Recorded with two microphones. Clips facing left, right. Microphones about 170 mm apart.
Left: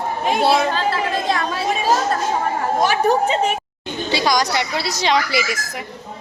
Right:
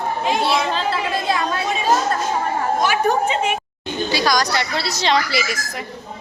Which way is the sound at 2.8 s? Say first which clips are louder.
Left 3 dB; 35° left (ahead or behind).